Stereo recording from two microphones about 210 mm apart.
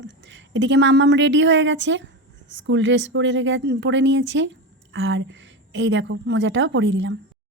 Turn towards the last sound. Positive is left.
turn(degrees=-60)  # may be behind; listen again after turning